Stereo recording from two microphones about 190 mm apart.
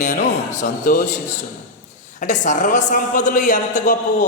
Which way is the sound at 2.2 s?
40° left (ahead or behind).